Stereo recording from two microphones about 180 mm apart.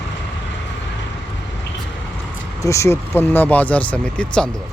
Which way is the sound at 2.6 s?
15° left (ahead or behind).